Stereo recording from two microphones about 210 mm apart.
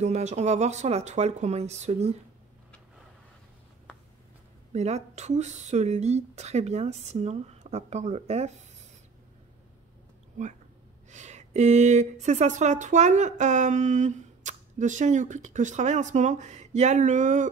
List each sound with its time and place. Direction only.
0.0 s speech: 30° right (ahead or behind)
4.7 s speech: 30° right (ahead or behind)
11.1 s speech: 35° right (ahead or behind)